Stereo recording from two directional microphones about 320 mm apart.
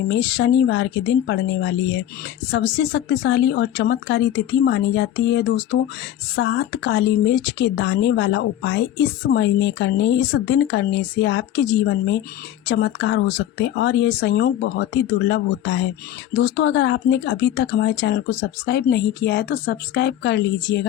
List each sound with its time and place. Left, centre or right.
0.1 s speech: left